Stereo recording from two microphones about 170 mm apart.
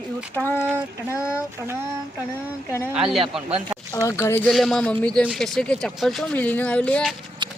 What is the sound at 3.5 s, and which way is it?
Speech, 30° right (ahead or behind).